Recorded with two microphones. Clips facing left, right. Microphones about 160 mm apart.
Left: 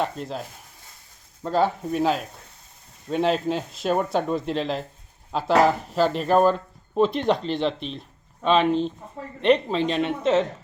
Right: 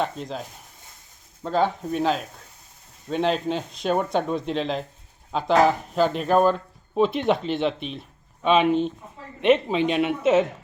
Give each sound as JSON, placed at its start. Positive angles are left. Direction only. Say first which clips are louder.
{"t": 0.0, "sound": "speech", "louder": "even", "side_deg": 5}